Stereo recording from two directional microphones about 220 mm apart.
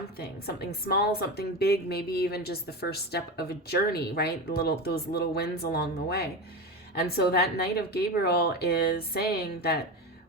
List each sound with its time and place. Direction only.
0.2 s a woman's voice: 45° left (ahead or behind)